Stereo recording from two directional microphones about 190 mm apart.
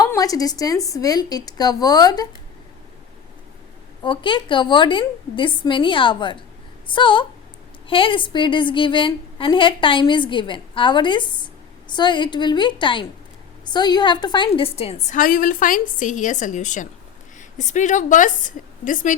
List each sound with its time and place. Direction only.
0.0 s a woman's voice: 20° left (ahead or behind)
4.0 s a woman's voice: 25° left (ahead or behind); by 19.1 s 45° left (ahead or behind)